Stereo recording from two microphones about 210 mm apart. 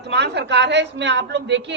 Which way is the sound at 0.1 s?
55° right (ahead or behind).